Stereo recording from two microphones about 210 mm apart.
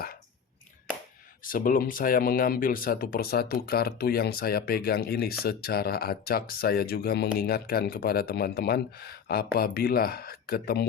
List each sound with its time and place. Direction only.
1.5 s speech: 40° left (ahead or behind)